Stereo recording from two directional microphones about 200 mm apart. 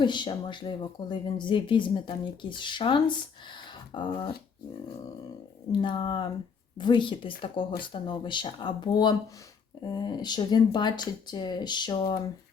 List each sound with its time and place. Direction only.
0.0 s speech: 25° left (ahead or behind)
5.8 s speech: 25° left (ahead or behind)